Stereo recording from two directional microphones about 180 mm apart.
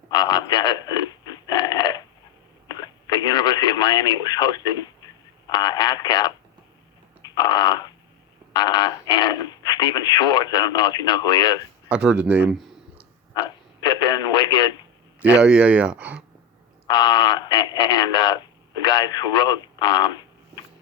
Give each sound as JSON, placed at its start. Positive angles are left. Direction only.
{"t": 0.1, "sound": "frog", "side_deg": 25}
{"t": 2.6, "sound": "radio", "side_deg": 20}
{"t": 5.5, "sound": "speech", "side_deg": 25}
{"t": 7.2, "sound": "a sound", "side_deg": 25}
{"t": 8.5, "sound": "speech", "side_deg": 25}
{"t": 11.9, "sound": "speech", "side_deg": -5}
{"t": 13.8, "sound": "radio", "side_deg": 25}
{"t": 15.2, "sound": "speech", "side_deg": -5}
{"t": 16.8, "sound": "speech", "side_deg": 25}